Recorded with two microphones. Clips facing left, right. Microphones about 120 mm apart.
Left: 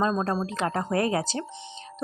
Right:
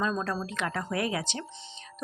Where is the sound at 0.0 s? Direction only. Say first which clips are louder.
Left 5 dB; 35° left (ahead or behind).